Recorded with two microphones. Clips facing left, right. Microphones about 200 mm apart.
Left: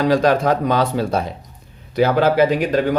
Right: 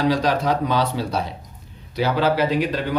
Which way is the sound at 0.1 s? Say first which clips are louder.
Left 5 dB; 50° left (ahead or behind).